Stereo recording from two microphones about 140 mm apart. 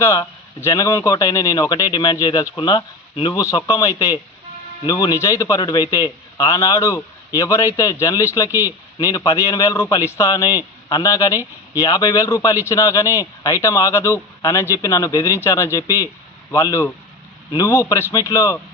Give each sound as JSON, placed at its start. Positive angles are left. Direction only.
{"t": 0.0, "sound": "a man's voice", "side_deg": 20}
{"t": 8.4, "sound": "speech", "side_deg": -15}
{"t": 9.0, "sound": "a man's voice", "side_deg": 25}